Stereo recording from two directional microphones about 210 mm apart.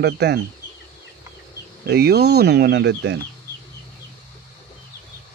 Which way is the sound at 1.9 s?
50° right (ahead or behind).